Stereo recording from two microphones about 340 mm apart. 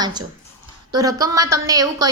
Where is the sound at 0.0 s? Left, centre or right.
Centre.